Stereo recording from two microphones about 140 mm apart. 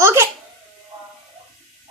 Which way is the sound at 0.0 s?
20° right (ahead or behind).